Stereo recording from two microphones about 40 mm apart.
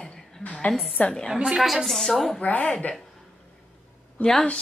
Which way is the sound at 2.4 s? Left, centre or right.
Left.